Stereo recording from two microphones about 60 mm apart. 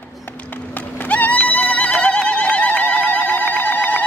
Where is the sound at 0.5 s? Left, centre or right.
Left.